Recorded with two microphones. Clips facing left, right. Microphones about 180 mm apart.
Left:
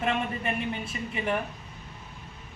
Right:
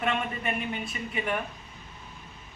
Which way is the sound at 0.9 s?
30° left (ahead or behind).